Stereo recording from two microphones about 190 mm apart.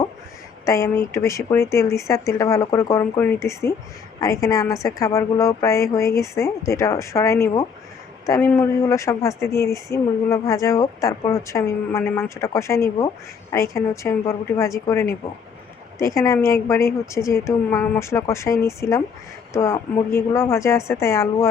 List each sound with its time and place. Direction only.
0.6 s speech: 15° left (ahead or behind)